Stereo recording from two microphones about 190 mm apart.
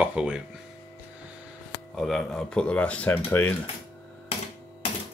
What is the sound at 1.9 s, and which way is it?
Speech, centre (ahead or behind).